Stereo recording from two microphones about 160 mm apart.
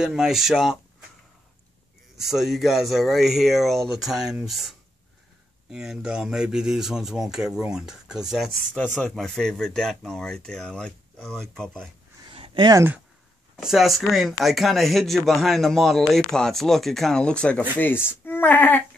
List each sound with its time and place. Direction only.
0.0 s speech: centre (ahead or behind)
2.1 s speech: centre (ahead or behind)
12.3 s a sound: 30° right (ahead or behind)
13.6 s speech: centre (ahead or behind)